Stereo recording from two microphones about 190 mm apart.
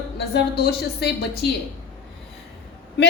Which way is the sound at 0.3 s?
55° left (ahead or behind).